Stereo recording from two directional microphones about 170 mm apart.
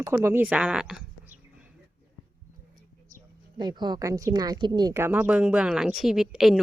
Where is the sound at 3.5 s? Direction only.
25° right (ahead or behind); by 6.6 s centre (ahead or behind).